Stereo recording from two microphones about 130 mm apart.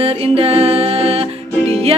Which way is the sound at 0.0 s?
50° right (ahead or behind).